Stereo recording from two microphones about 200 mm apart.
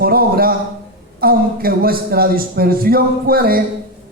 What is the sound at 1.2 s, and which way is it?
A man's voice, 50° right (ahead or behind).